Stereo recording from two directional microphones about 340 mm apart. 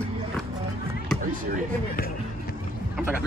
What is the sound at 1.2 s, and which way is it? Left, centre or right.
Speech, right.